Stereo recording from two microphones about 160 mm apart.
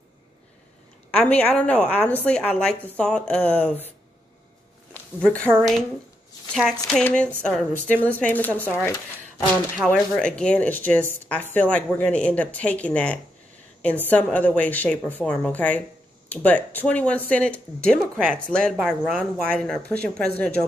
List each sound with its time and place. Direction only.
1.1 s speech: 10° left (ahead or behind)
5.2 s speech: 5° left (ahead or behind)
9.8 s speech: 5° left (ahead or behind)